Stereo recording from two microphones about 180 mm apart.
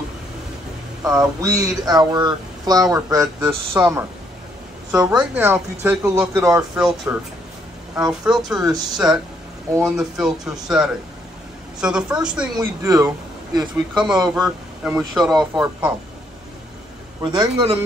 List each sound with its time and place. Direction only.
1.0 s speech: 20° right (ahead or behind)
12.5 s speech: 20° right (ahead or behind)
13.6 s speech: centre (ahead or behind)
17.2 s speech: 25° right (ahead or behind)